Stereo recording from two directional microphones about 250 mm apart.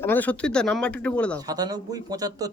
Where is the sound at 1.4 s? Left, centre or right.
Centre.